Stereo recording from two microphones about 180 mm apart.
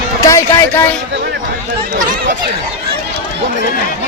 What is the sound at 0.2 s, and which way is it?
Speech, 20° left (ahead or behind).